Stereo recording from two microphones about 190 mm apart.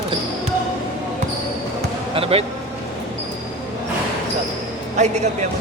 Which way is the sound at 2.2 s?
30° right (ahead or behind).